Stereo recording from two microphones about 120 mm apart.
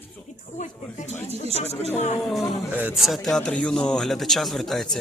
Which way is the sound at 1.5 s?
60° left (ahead or behind).